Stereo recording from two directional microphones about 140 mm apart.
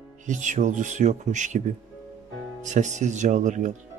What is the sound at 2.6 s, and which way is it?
Speech, 60° right (ahead or behind).